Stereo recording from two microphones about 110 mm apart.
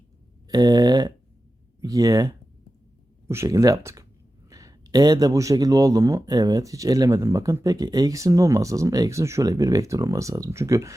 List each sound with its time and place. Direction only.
0.4 s a man's voice: 40° right (ahead or behind)